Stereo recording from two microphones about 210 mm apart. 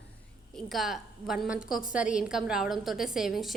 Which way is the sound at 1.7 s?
40° left (ahead or behind).